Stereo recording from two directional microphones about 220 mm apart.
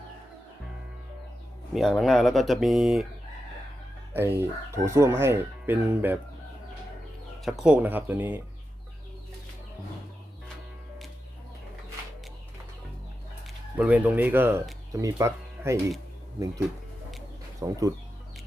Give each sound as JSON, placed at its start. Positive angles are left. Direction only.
{"t": 1.7, "sound": "speech", "side_deg": 0}
{"t": 4.1, "sound": "speech", "side_deg": -10}
{"t": 7.4, "sound": "speech", "side_deg": 0}
{"t": 13.7, "sound": "speech", "side_deg": -5}
{"t": 17.6, "sound": "speech", "side_deg": -15}